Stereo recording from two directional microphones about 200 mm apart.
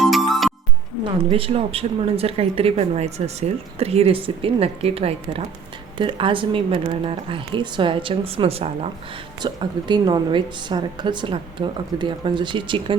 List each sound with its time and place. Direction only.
0.0 s music: centre (ahead or behind)
1.2 s speech: 30° right (ahead or behind)